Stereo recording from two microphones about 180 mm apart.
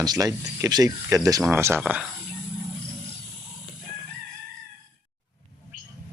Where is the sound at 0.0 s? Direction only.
20° right (ahead or behind); by 2.0 s 5° right (ahead or behind).